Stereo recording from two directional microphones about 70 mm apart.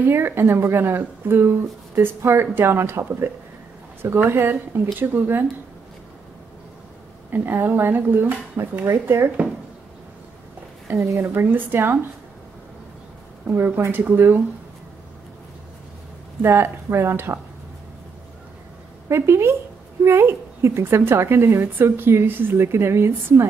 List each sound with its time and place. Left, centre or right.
0.0 s a woman's voice: right
7.2 s a woman's voice: right
10.9 s a woman's voice: right
13.5 s a woman's voice: right
16.4 s a woman's voice: right
19.0 s a woman's voice: right